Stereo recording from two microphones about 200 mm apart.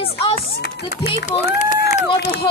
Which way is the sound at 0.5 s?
55° left (ahead or behind).